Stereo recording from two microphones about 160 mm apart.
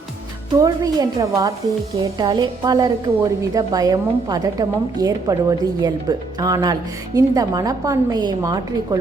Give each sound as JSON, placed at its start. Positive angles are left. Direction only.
{"t": 0.6, "sound": "a woman's voice", "side_deg": -20}